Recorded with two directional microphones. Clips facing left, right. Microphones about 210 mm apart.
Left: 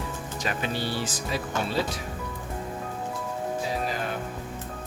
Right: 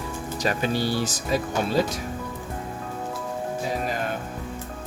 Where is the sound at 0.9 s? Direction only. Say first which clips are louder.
Right 5 dB; 40° right (ahead or behind).